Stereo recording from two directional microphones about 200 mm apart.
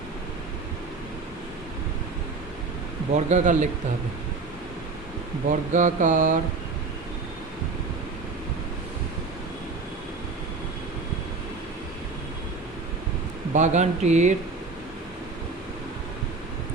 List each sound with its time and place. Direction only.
3.2 s mantra: 35° right (ahead or behind)
5.5 s mantra: 40° right (ahead or behind)
13.5 s mantra: 35° right (ahead or behind)